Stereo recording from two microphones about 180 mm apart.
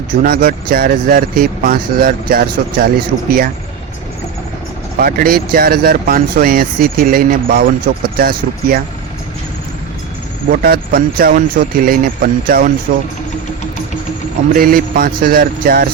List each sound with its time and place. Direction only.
0.2 s speech: 55° right (ahead or behind)
4.9 s speech: 55° right (ahead or behind)
10.5 s speech: 55° right (ahead or behind)
14.5 s speech: 50° right (ahead or behind)